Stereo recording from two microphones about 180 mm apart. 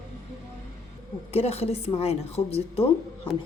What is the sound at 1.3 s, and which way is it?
A woman's voice, 35° left (ahead or behind).